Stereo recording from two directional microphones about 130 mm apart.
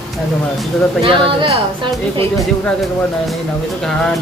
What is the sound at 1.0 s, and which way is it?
A woman's voice, 40° right (ahead or behind).